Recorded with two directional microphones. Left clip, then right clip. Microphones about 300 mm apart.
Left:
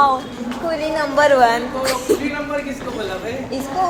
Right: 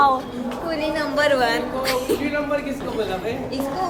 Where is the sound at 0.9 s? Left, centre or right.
Centre.